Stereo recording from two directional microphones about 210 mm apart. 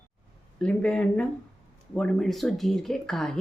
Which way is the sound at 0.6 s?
5° left (ahead or behind).